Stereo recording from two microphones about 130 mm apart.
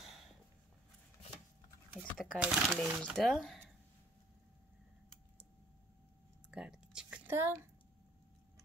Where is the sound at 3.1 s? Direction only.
Centre (ahead or behind).